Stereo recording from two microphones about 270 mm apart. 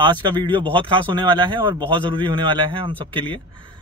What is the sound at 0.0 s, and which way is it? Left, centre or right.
A man's voice, centre.